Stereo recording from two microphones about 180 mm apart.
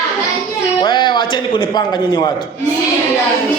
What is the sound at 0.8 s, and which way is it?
Speech, 25° left (ahead or behind).